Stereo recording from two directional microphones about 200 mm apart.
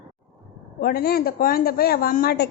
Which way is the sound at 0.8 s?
50° left (ahead or behind).